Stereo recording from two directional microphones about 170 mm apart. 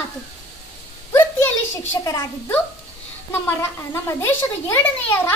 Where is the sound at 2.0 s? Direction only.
15° left (ahead or behind).